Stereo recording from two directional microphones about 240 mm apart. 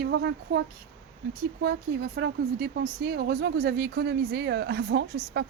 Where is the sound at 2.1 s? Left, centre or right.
Right.